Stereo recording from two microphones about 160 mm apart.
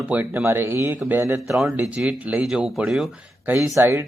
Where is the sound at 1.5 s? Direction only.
Centre (ahead or behind).